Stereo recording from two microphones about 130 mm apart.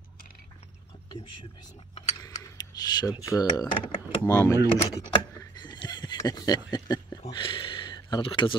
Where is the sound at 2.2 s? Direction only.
30° left (ahead or behind).